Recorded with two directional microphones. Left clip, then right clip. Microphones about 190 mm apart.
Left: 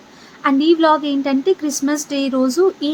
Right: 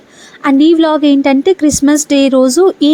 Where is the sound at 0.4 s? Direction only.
40° right (ahead or behind).